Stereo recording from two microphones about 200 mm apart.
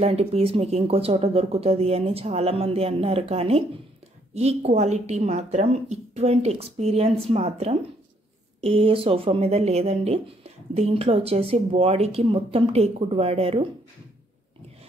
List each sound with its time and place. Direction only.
0.0 s speech: 30° right (ahead or behind)